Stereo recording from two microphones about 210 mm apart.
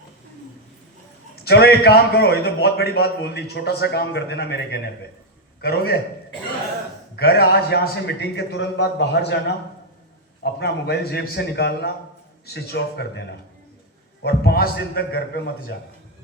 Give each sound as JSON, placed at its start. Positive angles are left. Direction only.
{"t": 1.5, "sound": "a man's voice", "side_deg": 50}
{"t": 7.2, "sound": "a man's voice", "side_deg": 50}
{"t": 10.4, "sound": "a man's voice", "side_deg": 50}